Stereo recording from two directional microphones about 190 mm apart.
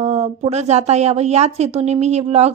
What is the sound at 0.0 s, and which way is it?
Speech, 35° right (ahead or behind).